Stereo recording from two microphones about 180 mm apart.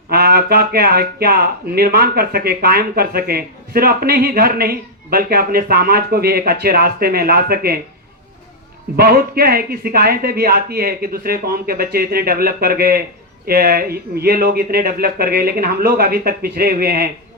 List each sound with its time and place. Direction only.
0.1 s speech: 60° right (ahead or behind)
9.0 s speech: 60° right (ahead or behind)